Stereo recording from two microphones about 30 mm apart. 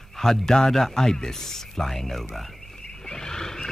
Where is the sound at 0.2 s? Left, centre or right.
Centre.